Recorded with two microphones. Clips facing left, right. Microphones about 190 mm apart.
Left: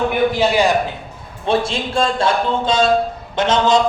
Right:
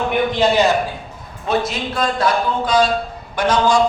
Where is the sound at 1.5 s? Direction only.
30° left (ahead or behind).